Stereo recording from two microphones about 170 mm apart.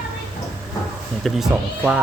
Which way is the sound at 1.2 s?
5° right (ahead or behind).